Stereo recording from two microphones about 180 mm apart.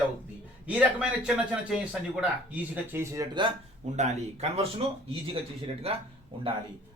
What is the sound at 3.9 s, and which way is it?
Speech, 40° right (ahead or behind).